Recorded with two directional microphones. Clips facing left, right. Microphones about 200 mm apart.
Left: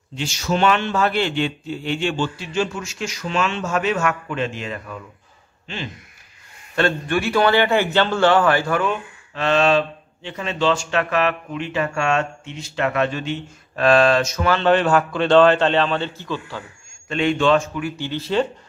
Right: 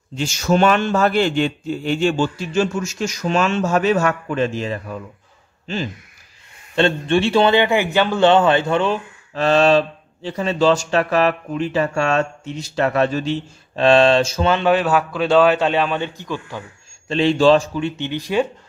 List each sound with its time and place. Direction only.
0.1 s a man's voice: 45° right (ahead or behind)
6.7 s a man's voice: 25° right (ahead or behind)
14.6 s a man's voice: 5° right (ahead or behind)
17.1 s speech: 30° right (ahead or behind); by 18.5 s 15° right (ahead or behind)